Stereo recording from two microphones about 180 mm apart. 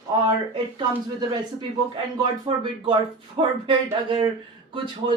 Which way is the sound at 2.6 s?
25° right (ahead or behind).